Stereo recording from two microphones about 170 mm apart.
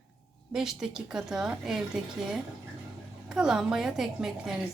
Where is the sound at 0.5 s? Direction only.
5° right (ahead or behind).